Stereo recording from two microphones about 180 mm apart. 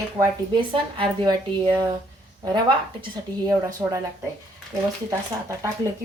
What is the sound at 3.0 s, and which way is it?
A woman's voice, 20° right (ahead or behind).